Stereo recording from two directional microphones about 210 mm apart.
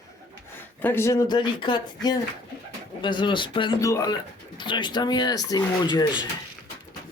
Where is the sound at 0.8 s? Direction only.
10° left (ahead or behind).